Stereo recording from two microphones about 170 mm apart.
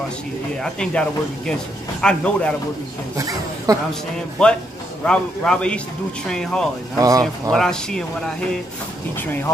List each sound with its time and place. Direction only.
0.6 s speech: 5° left (ahead or behind)
3.2 s speech: 20° right (ahead or behind)
4.4 s speech: 5° left (ahead or behind)
7.0 s speech: 20° right (ahead or behind)
7.5 s speech: 5° left (ahead or behind)
9.2 s speech: 10° left (ahead or behind)